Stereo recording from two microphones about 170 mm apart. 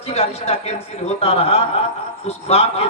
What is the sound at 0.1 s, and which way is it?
Speech, 35° left (ahead or behind).